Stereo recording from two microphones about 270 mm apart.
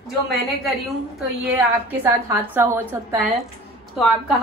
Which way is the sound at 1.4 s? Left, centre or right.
Centre.